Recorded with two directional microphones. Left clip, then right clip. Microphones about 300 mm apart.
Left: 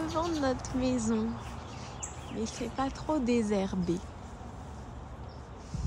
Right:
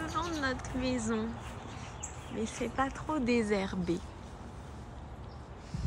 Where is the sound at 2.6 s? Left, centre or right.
Centre.